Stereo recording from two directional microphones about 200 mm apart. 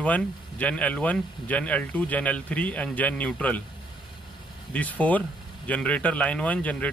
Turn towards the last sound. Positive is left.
turn(degrees=5)  # may be behind; listen again after turning